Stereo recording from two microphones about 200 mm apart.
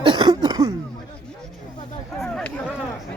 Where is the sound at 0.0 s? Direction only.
20° right (ahead or behind).